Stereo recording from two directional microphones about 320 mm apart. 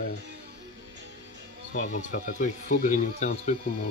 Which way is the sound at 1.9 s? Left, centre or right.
Left.